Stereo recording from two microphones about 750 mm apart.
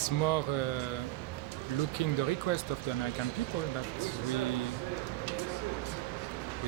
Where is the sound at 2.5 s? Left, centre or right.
Left.